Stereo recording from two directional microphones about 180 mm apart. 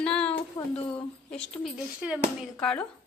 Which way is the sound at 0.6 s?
20° left (ahead or behind).